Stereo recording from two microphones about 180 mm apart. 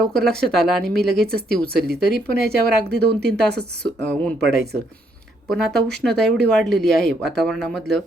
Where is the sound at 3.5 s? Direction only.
65° right (ahead or behind).